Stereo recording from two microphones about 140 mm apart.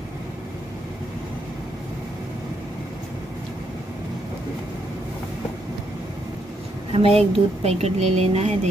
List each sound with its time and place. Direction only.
6.9 s speech: 45° right (ahead or behind)